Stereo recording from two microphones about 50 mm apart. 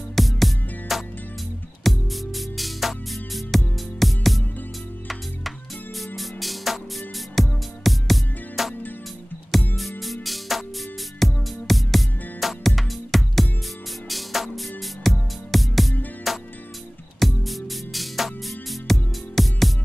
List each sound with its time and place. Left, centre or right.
0.1 s music: centre
5.9 s music: centre
9.8 s music: centre